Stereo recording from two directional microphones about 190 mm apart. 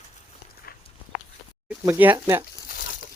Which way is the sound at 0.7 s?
50° left (ahead or behind).